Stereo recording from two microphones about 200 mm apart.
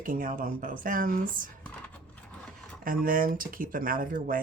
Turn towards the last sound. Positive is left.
turn(degrees=-45)  # may be behind; listen again after turning